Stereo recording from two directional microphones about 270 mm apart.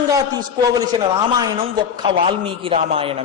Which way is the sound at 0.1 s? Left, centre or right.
Centre.